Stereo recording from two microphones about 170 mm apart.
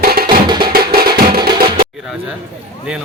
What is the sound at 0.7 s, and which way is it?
Music, 65° right (ahead or behind).